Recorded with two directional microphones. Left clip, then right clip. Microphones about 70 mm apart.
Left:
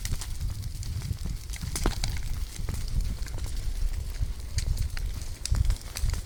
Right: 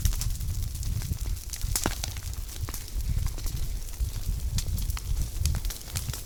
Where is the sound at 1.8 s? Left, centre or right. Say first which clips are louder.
Right 1 dB; right.